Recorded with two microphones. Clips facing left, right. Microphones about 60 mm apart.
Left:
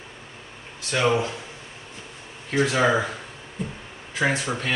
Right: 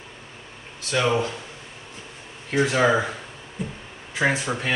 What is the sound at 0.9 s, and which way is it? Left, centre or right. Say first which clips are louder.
Speech: even; centre.